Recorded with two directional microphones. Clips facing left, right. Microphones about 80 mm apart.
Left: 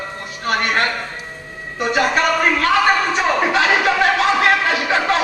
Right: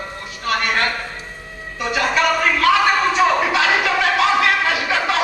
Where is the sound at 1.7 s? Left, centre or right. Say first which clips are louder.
Left 2 dB; left.